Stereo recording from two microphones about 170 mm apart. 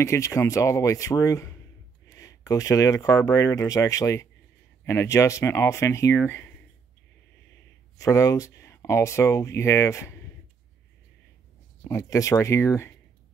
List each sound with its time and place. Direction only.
0.0 s speech: 15° left (ahead or behind)
8.0 s speech: 20° left (ahead or behind)
11.9 s speech: 20° left (ahead or behind)